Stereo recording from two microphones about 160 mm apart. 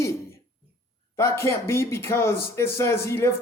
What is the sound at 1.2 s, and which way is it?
Speech, 15° left (ahead or behind).